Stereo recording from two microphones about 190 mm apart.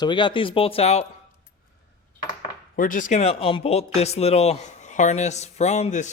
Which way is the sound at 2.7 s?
45° left (ahead or behind).